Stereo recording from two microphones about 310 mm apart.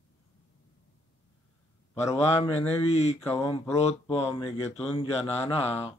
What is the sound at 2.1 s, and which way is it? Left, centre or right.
Speech, centre.